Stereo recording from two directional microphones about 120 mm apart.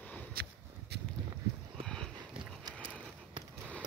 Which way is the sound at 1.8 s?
5° left (ahead or behind).